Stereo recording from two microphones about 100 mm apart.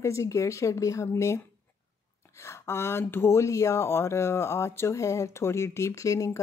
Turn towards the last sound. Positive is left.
turn(degrees=35)  # may be behind; listen again after turning